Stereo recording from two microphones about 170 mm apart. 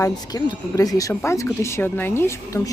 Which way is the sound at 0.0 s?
20° left (ahead or behind).